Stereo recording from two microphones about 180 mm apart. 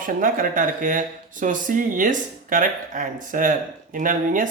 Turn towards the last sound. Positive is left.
turn(degrees=-45)  # may be behind; listen again after turning